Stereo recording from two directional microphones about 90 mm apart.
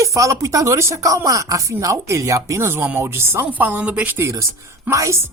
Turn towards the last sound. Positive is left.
turn(degrees=-35)  # may be behind; listen again after turning